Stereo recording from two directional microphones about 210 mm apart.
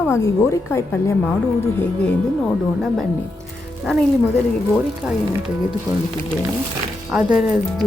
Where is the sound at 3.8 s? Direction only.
Centre (ahead or behind).